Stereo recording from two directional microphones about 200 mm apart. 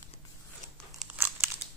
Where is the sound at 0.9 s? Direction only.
10° right (ahead or behind).